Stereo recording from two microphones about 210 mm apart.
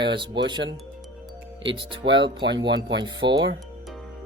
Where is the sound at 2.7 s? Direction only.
55° right (ahead or behind).